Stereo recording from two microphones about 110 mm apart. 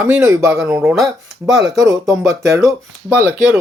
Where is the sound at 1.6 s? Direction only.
30° right (ahead or behind).